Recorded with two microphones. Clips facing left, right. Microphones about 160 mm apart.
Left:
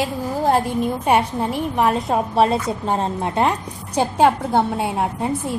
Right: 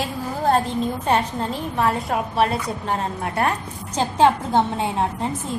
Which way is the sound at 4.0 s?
10° left (ahead or behind).